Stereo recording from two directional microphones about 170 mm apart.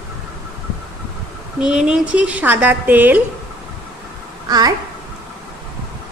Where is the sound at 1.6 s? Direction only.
5° right (ahead or behind).